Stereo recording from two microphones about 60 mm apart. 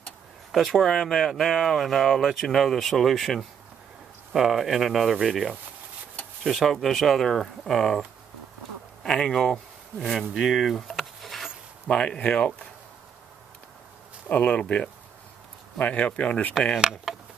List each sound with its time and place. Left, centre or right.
0.5 s speech: centre
9.0 s speech: centre
10.4 s a sound: centre
11.9 s speech: centre
14.3 s speech: left
16.7 s speech: centre